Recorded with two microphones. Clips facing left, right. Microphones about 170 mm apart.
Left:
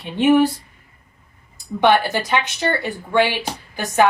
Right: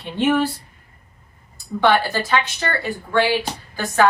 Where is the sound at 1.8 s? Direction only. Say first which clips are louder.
Left 2 dB; 20° left (ahead or behind).